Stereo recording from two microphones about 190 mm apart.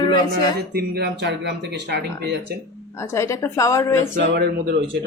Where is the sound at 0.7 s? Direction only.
55° right (ahead or behind).